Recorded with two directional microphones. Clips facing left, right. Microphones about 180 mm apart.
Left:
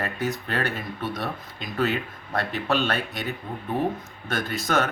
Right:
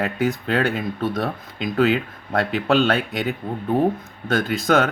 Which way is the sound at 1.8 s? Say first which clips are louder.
Right 6 dB; 90° right.